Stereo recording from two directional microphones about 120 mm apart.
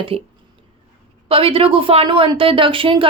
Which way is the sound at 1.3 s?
50° right (ahead or behind).